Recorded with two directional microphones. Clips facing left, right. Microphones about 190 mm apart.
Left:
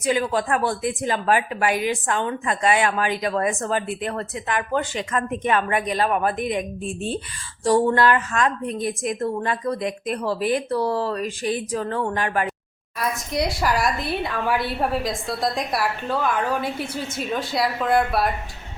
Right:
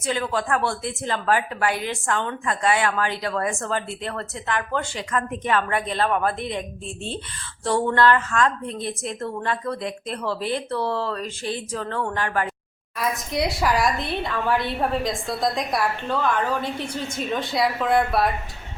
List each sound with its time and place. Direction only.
0.0 s a woman's voice: 15° left (ahead or behind)
13.0 s a woman's voice: centre (ahead or behind)